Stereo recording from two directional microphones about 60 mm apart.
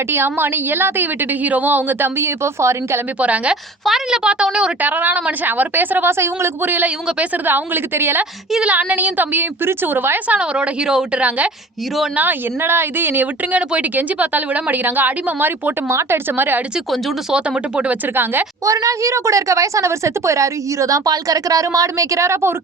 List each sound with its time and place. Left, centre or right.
0.1 s a woman's voice: right
3.2 s speech: right
3.5 s a woman's voice: centre
4.8 s a woman's voice: right
6.7 s a woman's voice: right
8.6 s a woman's voice: right
10.2 s a woman's voice: centre; by 13.2 s right
13.5 s speech: right
15.9 s a woman's voice: right
17.3 s speech: centre
18.6 s a woman's voice: right